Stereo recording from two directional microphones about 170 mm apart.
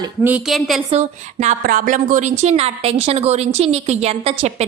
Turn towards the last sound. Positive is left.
turn(degrees=-40)  # may be behind; listen again after turning